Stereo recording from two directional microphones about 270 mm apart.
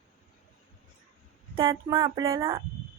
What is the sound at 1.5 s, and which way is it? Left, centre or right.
Speech, centre.